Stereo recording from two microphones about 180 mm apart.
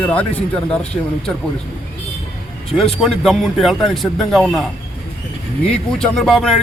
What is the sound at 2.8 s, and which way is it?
Speech, centre (ahead or behind).